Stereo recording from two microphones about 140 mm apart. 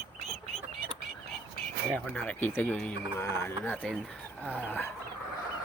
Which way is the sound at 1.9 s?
10° left (ahead or behind).